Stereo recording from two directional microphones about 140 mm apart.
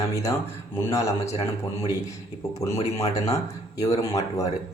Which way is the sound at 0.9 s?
20° left (ahead or behind).